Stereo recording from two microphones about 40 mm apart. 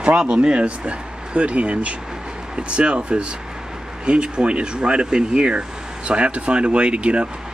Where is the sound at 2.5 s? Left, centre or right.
Right.